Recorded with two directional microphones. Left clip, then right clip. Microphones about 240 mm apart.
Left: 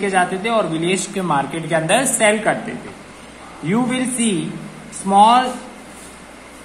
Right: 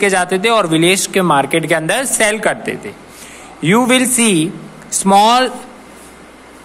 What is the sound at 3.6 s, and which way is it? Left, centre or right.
A man's voice, right.